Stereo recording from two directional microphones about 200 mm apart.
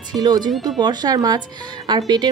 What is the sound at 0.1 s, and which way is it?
Speech, 20° right (ahead or behind).